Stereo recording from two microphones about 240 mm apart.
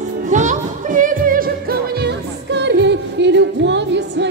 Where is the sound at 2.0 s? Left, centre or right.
Right.